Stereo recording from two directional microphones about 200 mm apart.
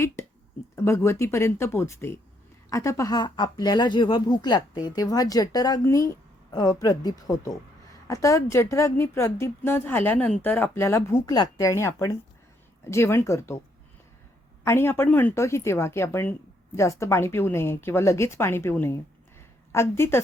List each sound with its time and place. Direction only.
0.8 s a woman's voice: 15° left (ahead or behind)
14.6 s a woman's voice: 15° left (ahead or behind)